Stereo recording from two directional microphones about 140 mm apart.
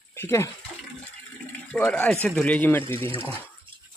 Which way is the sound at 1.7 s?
10° left (ahead or behind).